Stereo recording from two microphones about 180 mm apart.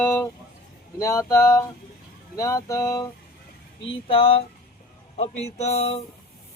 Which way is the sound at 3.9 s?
30° left (ahead or behind).